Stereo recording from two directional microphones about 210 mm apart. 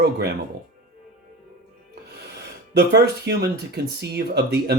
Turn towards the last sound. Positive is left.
turn(degrees=-50)  # may be behind; listen again after turning